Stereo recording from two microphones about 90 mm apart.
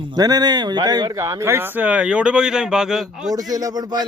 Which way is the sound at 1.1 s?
35° right (ahead or behind).